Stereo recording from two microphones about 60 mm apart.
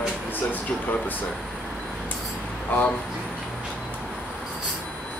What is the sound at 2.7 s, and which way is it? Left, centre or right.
Speech, left.